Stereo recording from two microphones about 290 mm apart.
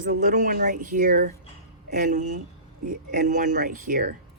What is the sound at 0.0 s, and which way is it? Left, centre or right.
Speech, right.